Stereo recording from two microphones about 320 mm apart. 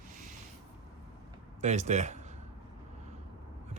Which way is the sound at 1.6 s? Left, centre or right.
Right.